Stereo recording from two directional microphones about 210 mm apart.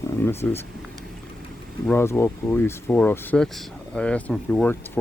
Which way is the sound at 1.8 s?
10° left (ahead or behind).